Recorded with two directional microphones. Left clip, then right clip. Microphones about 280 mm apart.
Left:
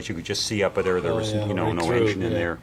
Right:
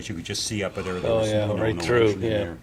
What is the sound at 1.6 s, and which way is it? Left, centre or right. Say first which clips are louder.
Speech: left 1 dB; left.